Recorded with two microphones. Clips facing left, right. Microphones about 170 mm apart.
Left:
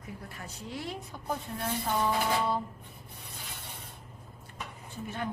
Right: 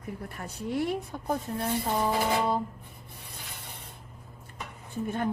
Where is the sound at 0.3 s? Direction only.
55° right (ahead or behind).